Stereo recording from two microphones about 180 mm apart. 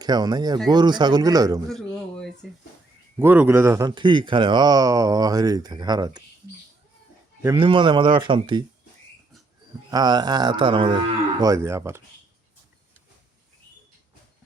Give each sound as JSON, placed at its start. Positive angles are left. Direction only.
{"t": 0.0, "sound": "speech", "side_deg": -20}
{"t": 1.7, "sound": "a sound", "side_deg": 0}
{"t": 3.2, "sound": "speech", "side_deg": -10}
{"t": 7.6, "sound": "speech", "side_deg": -25}
{"t": 9.9, "sound": "speech", "side_deg": -25}